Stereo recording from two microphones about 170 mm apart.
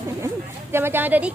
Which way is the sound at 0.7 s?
15° right (ahead or behind).